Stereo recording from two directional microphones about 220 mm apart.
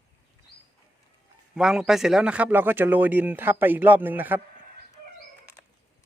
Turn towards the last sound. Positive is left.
turn(degrees=-10)  # may be behind; listen again after turning